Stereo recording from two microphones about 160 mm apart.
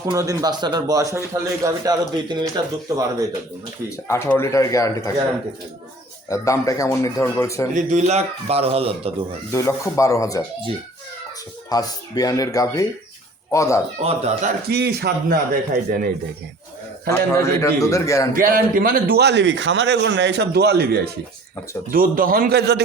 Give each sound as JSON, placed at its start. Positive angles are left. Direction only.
{"t": 0.0, "sound": "a man's voice", "side_deg": -20}
{"t": 3.8, "sound": "speech", "side_deg": 15}
{"t": 6.2, "sound": "speech", "side_deg": 20}
{"t": 7.8, "sound": "a man's voice", "side_deg": -45}
{"t": 9.5, "sound": "speech", "side_deg": 15}
{"t": 11.7, "sound": "speech", "side_deg": 25}
{"t": 14.0, "sound": "a man's voice", "side_deg": -40}
{"t": 14.7, "sound": "a man's voice", "side_deg": -90}
{"t": 17.1, "sound": "speech", "side_deg": 20}
{"t": 18.3, "sound": "a man's voice", "side_deg": -65}
{"t": 21.9, "sound": "a man's voice", "side_deg": -60}